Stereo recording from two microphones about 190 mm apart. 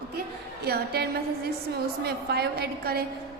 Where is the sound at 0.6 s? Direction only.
55° right (ahead or behind).